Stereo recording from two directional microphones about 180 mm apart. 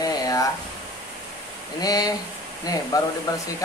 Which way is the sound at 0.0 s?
20° left (ahead or behind).